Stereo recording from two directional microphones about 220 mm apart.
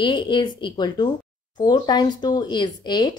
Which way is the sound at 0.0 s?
20° left (ahead or behind).